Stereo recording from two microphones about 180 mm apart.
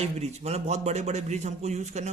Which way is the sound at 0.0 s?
35° right (ahead or behind).